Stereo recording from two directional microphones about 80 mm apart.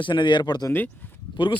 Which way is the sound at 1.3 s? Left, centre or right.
Left.